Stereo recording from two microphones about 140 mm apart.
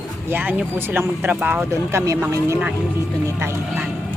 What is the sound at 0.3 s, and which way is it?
Speech, 15° right (ahead or behind).